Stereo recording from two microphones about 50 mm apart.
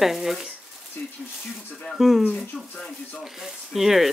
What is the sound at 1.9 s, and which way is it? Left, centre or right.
Speech, centre.